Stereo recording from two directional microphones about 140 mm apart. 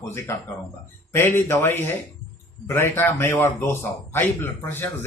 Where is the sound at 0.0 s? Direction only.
20° left (ahead or behind).